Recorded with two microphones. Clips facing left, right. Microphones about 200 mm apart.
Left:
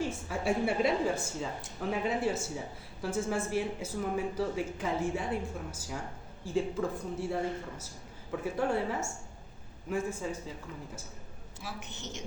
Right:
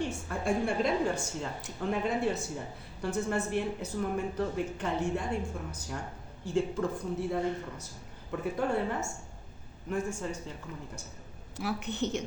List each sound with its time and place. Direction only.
0.0 s a woman's voice: 5° left (ahead or behind)
11.5 s a woman's voice: 65° right (ahead or behind)